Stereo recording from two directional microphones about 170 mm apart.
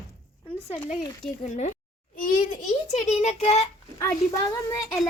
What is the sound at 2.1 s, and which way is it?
A child's voice, 50° left (ahead or behind).